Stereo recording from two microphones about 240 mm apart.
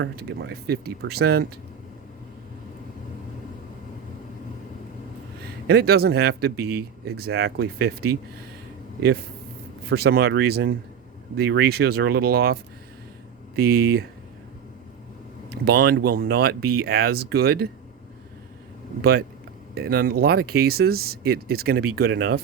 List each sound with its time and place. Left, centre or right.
0.0 s speech: right
5.6 s speech: right
9.9 s speech: right
13.6 s speech: right
15.6 s speech: right
19.7 s speech: right